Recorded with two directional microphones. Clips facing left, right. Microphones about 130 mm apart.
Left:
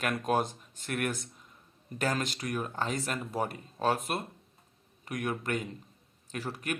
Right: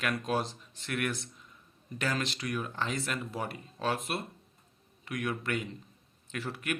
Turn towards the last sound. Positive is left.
turn(degrees=40)  # may be behind; listen again after turning